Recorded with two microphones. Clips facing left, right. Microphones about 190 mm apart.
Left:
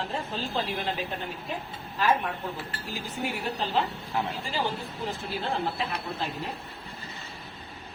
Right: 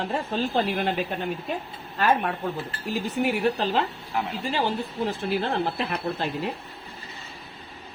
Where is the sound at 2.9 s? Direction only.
65° right (ahead or behind).